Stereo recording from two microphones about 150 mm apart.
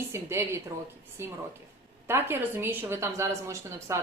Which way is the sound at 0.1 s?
15° right (ahead or behind).